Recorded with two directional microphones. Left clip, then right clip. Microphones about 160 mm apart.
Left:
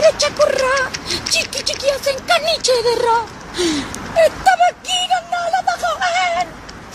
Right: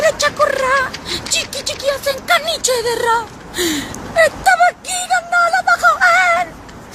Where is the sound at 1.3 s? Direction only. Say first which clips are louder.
Left 1 dB; centre (ahead or behind).